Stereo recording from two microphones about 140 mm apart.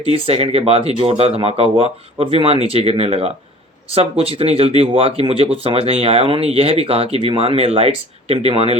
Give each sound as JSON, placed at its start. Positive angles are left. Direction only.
{"t": 0.1, "sound": "speech", "side_deg": -40}